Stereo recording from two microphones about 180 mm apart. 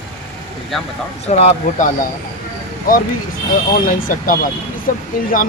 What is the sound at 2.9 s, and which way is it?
Speech, 50° left (ahead or behind).